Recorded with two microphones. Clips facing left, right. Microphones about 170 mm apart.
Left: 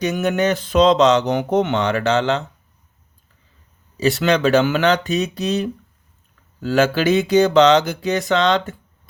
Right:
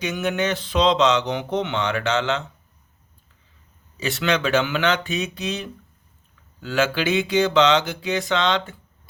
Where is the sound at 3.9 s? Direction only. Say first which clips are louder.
Left 6 dB; 40° left (ahead or behind).